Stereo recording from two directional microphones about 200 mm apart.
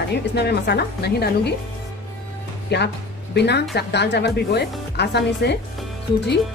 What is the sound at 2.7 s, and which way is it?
Speech, 55° left (ahead or behind).